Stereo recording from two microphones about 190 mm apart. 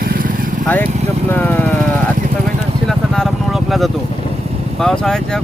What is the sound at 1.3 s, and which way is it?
Vehicle, 10° left (ahead or behind).